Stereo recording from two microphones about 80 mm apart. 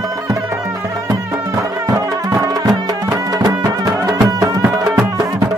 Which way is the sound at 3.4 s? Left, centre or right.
Right.